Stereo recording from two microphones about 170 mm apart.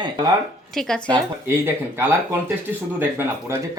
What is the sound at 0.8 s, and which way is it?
Speech, 5° left (ahead or behind).